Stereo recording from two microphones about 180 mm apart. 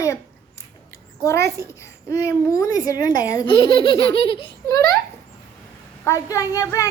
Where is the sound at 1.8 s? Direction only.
15° left (ahead or behind).